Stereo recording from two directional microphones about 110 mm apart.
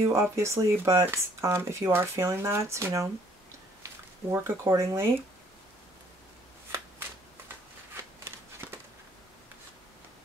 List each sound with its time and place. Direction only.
0.1 s speech: 25° right (ahead or behind)
7.9 s scissors: 25° right (ahead or behind)